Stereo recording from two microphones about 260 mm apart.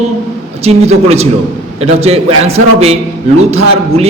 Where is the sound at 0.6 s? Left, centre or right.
Right.